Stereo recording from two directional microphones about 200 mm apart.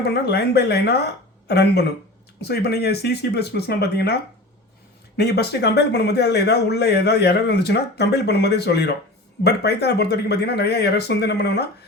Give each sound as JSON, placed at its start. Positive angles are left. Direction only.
{"t": 0.0, "sound": "speech", "side_deg": 55}